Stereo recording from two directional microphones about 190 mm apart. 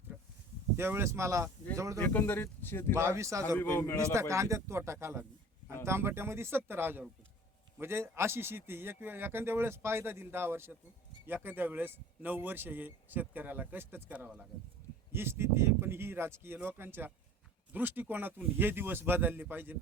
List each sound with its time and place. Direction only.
0.1 s a sound: 10° right (ahead or behind)
0.8 s a man's voice: 10° right (ahead or behind)
2.0 s speech: 10° left (ahead or behind)
2.9 s a man's voice: 15° right (ahead or behind)
3.6 s speech: 10° left (ahead or behind)
4.1 s a man's voice: 15° right (ahead or behind)